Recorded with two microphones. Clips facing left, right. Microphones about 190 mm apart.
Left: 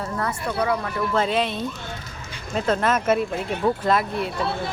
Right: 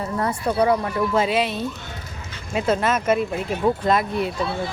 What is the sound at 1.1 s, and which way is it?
Speech, 10° right (ahead or behind).